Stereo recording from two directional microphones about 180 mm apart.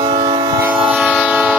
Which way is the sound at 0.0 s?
25° right (ahead or behind).